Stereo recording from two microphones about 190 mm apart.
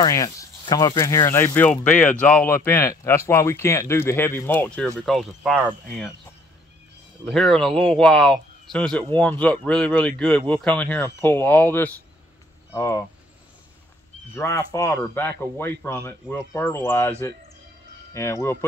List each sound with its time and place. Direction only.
0.0 s speech: 15° left (ahead or behind); by 6.1 s centre (ahead or behind)
7.2 s speech: centre (ahead or behind)
14.3 s speech: 15° left (ahead or behind)
18.1 s speech: 15° left (ahead or behind)